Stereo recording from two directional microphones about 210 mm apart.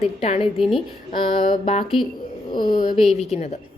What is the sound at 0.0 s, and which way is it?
A woman's voice, 30° left (ahead or behind).